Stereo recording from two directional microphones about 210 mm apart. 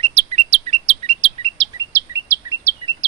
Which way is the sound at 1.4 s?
15° right (ahead or behind).